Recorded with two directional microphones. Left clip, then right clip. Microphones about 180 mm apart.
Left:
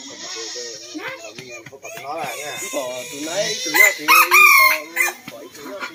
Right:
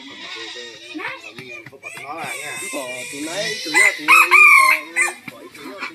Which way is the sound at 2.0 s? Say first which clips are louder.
Left 2 dB; 25° left (ahead or behind).